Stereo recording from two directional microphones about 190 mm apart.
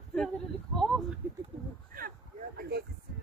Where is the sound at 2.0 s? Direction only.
50° right (ahead or behind).